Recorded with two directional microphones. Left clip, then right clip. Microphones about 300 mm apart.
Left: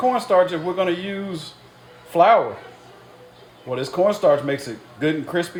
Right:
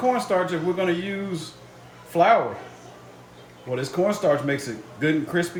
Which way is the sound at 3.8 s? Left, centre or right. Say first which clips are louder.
Left 5 dB; left.